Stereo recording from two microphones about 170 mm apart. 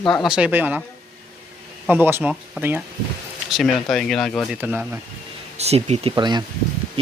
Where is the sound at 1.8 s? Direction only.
10° right (ahead or behind).